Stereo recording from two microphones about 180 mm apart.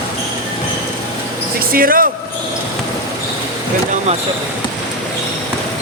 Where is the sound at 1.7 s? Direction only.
50° right (ahead or behind).